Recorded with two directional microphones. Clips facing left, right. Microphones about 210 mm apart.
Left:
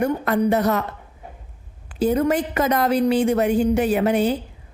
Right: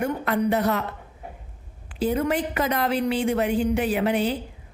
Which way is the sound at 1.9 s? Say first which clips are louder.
Left 4 dB; 45° left (ahead or behind).